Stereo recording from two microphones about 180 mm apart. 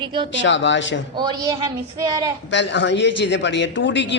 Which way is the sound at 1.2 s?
20° right (ahead or behind).